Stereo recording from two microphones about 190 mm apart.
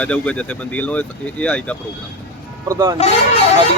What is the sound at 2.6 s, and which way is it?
Speech, 20° right (ahead or behind).